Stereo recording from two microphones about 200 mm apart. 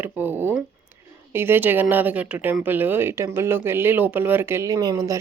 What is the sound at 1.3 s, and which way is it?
Speech, 10° right (ahead or behind).